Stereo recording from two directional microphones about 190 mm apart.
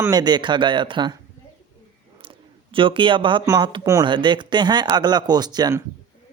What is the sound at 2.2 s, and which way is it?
Speech, 25° right (ahead or behind).